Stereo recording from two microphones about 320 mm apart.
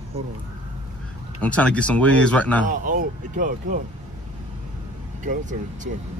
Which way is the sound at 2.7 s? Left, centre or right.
Right.